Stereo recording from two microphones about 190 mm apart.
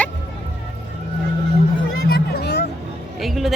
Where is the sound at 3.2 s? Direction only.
Centre (ahead or behind).